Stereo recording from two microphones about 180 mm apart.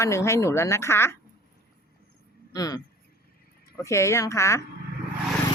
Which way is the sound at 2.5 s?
20° left (ahead or behind).